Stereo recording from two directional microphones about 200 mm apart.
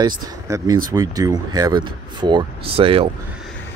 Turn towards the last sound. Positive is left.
turn(degrees=-25)  # may be behind; listen again after turning